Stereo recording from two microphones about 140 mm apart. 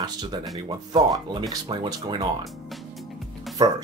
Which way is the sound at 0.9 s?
30° right (ahead or behind).